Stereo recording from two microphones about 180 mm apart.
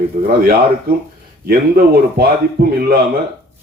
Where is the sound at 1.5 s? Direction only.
60° right (ahead or behind).